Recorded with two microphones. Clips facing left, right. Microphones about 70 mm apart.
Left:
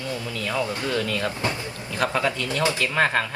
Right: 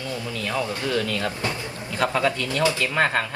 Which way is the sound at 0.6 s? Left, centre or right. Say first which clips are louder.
Right 1 dB; left.